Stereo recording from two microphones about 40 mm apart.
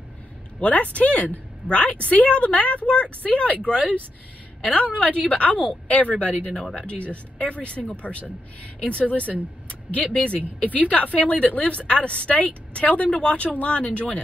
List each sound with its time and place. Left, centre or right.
0.6 s speech: left